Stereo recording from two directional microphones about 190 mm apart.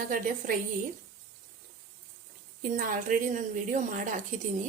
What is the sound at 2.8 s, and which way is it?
A woman's voice, 45° right (ahead or behind).